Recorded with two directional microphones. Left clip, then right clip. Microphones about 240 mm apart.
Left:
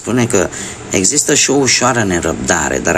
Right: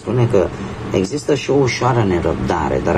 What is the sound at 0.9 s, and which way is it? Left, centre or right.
Speech, left.